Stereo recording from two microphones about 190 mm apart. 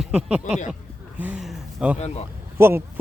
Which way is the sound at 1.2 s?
5° right (ahead or behind).